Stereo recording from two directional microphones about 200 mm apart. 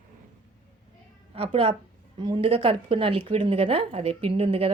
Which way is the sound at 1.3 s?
30° right (ahead or behind).